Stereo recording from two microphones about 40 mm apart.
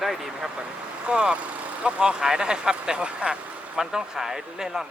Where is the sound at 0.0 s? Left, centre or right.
Centre.